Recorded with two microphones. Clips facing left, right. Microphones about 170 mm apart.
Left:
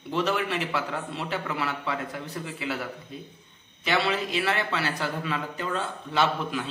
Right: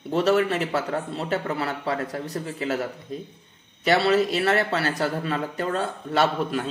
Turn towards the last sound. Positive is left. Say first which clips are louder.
# right 3 dB
turn(degrees=-40)  # may be behind; listen again after turning